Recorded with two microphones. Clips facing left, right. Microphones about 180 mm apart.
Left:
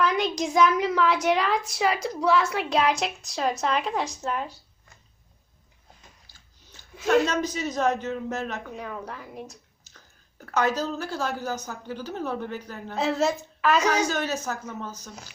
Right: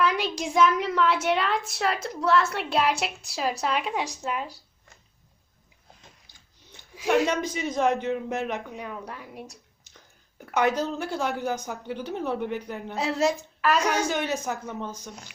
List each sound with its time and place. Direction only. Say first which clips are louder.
0.0 s a woman's voice: left 1 dB; 5° right (ahead or behind)
6.9 s a woman's voice: left 1 dB; 10° right (ahead or behind)
13.0 s a woman's voice: left 1 dB; centre (ahead or behind); by 14.8 s 15° right (ahead or behind)
14.8 s a woman's voice: right 1 dB; 5° left (ahead or behind)